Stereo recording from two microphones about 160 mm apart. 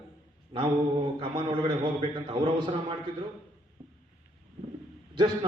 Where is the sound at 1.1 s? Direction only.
30° right (ahead or behind).